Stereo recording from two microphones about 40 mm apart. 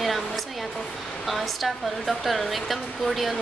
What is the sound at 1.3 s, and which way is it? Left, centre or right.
Speech, centre.